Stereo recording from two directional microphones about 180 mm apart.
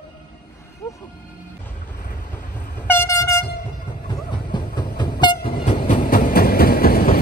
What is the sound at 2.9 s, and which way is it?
Train, 15° left (ahead or behind).